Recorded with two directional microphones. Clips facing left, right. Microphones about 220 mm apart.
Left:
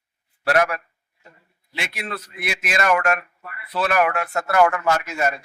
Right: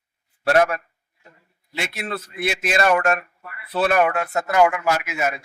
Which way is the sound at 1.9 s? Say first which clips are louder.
Right 2 dB; 25° right (ahead or behind).